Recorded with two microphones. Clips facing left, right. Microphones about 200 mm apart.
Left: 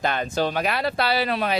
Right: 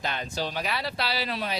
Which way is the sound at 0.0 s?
55° left (ahead or behind).